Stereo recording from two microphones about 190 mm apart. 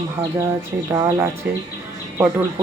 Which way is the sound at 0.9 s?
20° right (ahead or behind).